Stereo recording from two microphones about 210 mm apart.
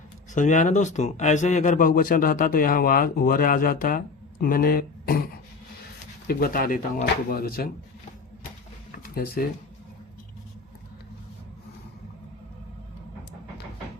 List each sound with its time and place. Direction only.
0.3 s a man's voice: 35° left (ahead or behind)
6.2 s speech: 45° left (ahead or behind)
9.0 s speech: 45° left (ahead or behind)